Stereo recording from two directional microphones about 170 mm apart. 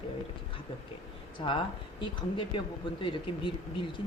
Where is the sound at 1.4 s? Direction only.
30° left (ahead or behind).